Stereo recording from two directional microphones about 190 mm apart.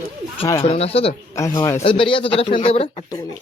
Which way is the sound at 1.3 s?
15° left (ahead or behind).